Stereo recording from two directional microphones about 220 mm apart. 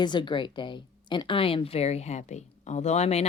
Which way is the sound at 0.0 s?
20° left (ahead or behind).